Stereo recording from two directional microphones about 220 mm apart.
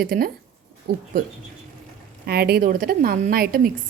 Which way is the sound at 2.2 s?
45° right (ahead or behind).